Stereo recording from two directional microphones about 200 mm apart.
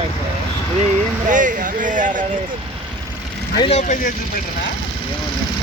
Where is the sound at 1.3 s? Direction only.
40° right (ahead or behind).